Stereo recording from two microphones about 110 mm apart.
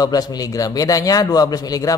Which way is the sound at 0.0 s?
35° left (ahead or behind).